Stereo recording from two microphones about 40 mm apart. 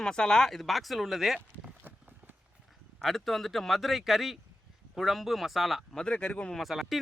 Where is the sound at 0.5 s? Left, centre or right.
Centre.